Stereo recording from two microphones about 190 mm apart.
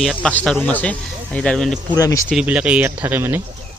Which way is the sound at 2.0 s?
15° left (ahead or behind).